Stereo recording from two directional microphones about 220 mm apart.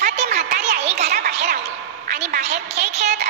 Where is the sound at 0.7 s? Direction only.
30° right (ahead or behind).